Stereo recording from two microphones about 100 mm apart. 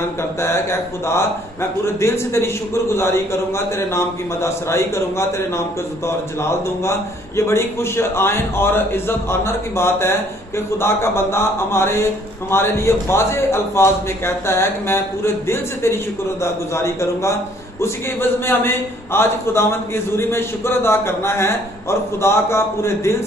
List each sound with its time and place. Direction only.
0.2 s a man's voice: 25° left (ahead or behind)